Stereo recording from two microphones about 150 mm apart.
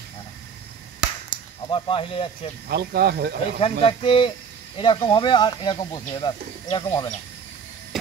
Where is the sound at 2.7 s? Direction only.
90° right.